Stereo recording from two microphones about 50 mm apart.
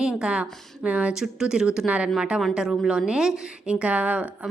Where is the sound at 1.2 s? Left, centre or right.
Centre.